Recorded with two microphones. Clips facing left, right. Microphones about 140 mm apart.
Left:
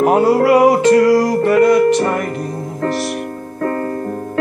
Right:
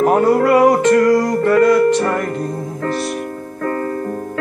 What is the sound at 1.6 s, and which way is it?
Music, 70° left (ahead or behind).